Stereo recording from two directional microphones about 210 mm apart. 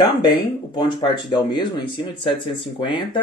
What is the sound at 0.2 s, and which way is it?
Speech, 20° left (ahead or behind).